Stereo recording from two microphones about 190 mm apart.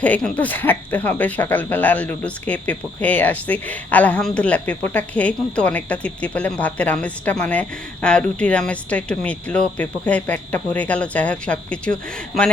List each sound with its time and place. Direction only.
0.0 s speech: 5° left (ahead or behind)